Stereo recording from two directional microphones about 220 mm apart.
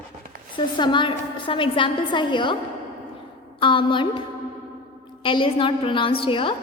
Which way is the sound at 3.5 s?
20° left (ahead or behind).